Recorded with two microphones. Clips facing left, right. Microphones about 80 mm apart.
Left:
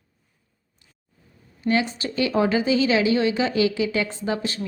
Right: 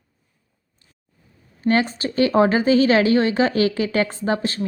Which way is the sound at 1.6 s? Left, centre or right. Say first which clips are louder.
Right 3 dB; right.